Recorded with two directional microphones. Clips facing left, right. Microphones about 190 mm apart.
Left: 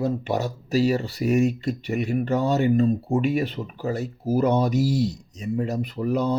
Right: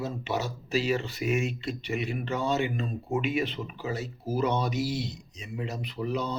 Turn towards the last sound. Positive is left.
turn(degrees=50)  # may be behind; listen again after turning